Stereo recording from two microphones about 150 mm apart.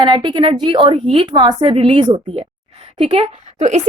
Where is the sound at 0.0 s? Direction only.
30° right (ahead or behind).